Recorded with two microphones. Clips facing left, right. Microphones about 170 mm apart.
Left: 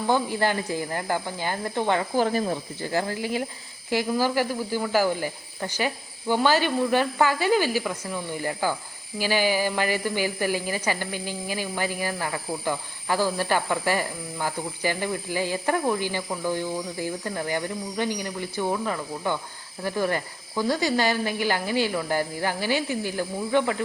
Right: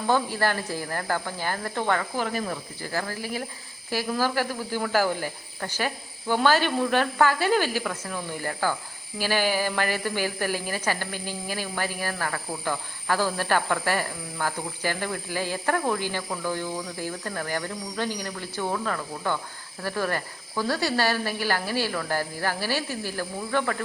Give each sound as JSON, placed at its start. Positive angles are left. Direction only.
{"t": 0.1, "sound": "speech", "side_deg": 15}
{"t": 2.1, "sound": "speech", "side_deg": 30}